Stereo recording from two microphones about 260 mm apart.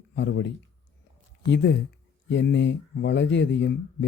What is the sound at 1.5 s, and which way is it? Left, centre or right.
Speech, left.